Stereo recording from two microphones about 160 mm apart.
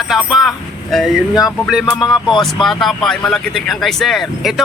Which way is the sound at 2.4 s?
Centre (ahead or behind).